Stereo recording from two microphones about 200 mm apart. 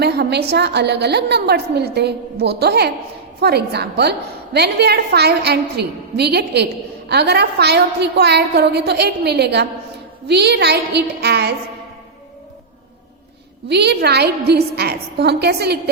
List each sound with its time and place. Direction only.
0.0 s a woman's voice: 55° right (ahead or behind)
13.7 s a woman's voice: 55° right (ahead or behind)